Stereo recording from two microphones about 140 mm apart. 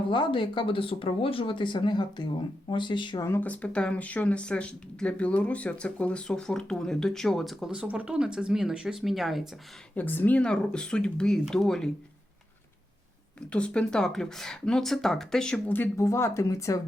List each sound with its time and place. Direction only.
0.1 s speech: 35° left (ahead or behind)
3.2 s speech: 15° left (ahead or behind)
9.9 s speech: 10° left (ahead or behind)
13.5 s speech: 10° left (ahead or behind); by 16.8 s 25° left (ahead or behind)